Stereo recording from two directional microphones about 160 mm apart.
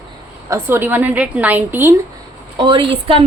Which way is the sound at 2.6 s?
30° right (ahead or behind).